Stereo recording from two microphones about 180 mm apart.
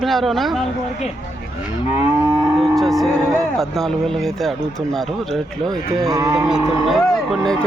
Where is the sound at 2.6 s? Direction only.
Centre (ahead or behind).